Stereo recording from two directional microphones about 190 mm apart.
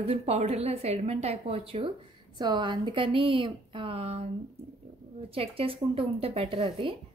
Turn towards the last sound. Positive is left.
turn(degrees=-25)  # may be behind; listen again after turning